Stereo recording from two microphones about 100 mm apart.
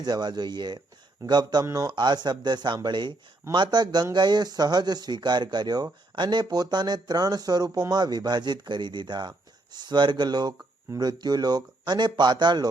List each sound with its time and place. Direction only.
0.0 s speech: 45° right (ahead or behind)